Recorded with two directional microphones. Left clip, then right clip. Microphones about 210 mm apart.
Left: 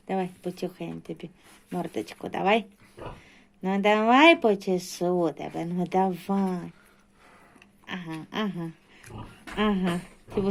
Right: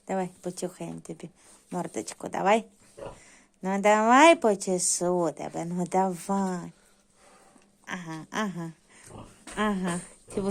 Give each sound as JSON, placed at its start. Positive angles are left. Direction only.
{"t": 0.1, "sound": "speech", "side_deg": -15}
{"t": 7.9, "sound": "speech", "side_deg": -15}